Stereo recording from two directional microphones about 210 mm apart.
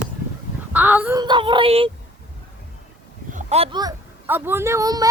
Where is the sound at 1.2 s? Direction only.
20° right (ahead or behind).